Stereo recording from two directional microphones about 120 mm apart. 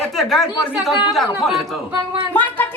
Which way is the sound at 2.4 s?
15° left (ahead or behind).